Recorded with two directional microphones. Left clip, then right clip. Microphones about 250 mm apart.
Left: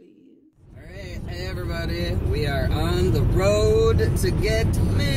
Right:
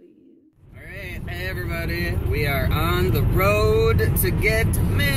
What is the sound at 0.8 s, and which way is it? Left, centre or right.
Speech, centre.